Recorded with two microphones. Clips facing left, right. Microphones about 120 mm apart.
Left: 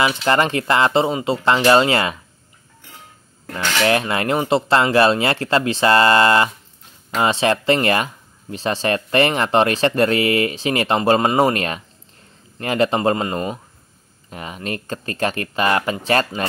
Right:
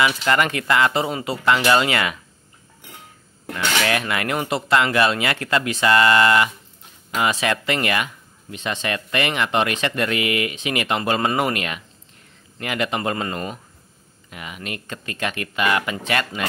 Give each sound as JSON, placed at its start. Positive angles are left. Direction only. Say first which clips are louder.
{"t": 0.0, "sound": "speech", "louder": "left 2 dB", "side_deg": 30}
{"t": 3.5, "sound": "speech", "louder": "left 4 dB", "side_deg": 30}
{"t": 14.3, "sound": "speech", "louder": "left 5 dB", "side_deg": 35}